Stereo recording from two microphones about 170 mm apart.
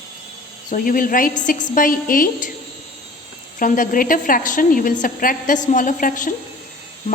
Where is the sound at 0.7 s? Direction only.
55° left (ahead or behind).